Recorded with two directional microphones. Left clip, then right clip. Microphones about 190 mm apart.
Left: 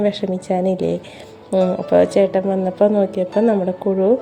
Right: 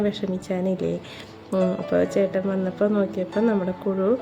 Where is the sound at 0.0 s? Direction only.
15° left (ahead or behind).